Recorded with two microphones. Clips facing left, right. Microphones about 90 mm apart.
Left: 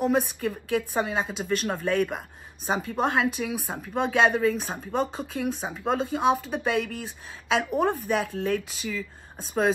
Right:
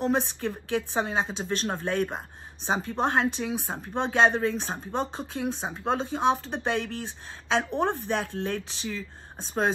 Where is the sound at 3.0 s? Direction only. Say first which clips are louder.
Left 1 dB; 5° left (ahead or behind).